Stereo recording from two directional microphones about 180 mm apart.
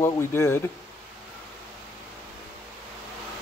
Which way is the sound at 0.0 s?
15° left (ahead or behind).